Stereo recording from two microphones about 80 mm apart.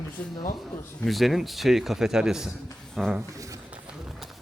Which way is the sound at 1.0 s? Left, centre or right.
Centre.